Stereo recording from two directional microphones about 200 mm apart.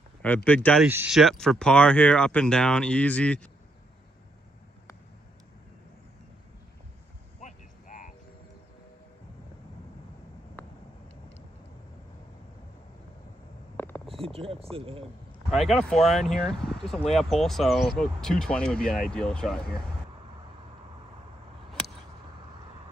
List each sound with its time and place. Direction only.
0.2 s speech: 10° left (ahead or behind)
0.8 s speech: 10° right (ahead or behind)
7.3 s vehicle: 40° left (ahead or behind)
10.6 s vehicle: 10° left (ahead or behind)
13.7 s a sound: 10° left (ahead or behind)
14.2 s a sound: 30° right (ahead or behind)
15.7 s speech: 5° left (ahead or behind)